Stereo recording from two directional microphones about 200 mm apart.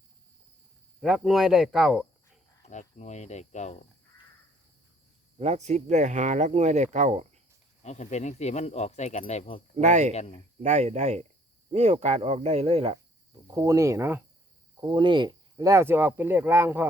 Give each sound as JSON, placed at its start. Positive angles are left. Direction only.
{"t": 1.0, "sound": "speech", "side_deg": 0}
{"t": 2.6, "sound": "speech", "side_deg": 35}
{"t": 5.4, "sound": "speech", "side_deg": -35}
{"t": 7.8, "sound": "speech", "side_deg": 35}
{"t": 9.7, "sound": "speech", "side_deg": -35}
{"t": 10.1, "sound": "speech", "side_deg": 30}
{"t": 10.6, "sound": "speech", "side_deg": -35}
{"t": 13.5, "sound": "speech", "side_deg": -15}
{"t": 14.8, "sound": "speech", "side_deg": -20}